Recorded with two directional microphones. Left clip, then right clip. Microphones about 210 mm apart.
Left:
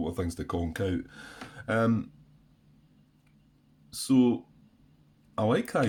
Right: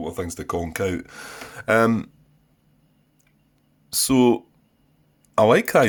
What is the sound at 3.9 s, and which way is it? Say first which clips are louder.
Speech: right 7 dB; 40° right (ahead or behind).